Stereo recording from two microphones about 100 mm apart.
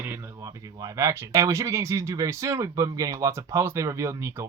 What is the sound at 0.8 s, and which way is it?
Speech, 30° right (ahead or behind).